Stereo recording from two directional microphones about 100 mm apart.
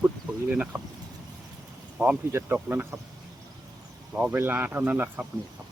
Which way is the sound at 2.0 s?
25° right (ahead or behind).